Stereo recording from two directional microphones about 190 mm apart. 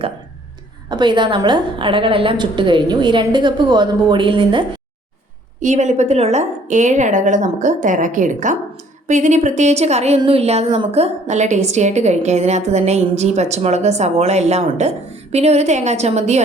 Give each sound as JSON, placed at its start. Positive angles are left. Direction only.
{"t": 0.9, "sound": "a woman's voice", "side_deg": -25}
{"t": 5.5, "sound": "a woman's voice", "side_deg": -40}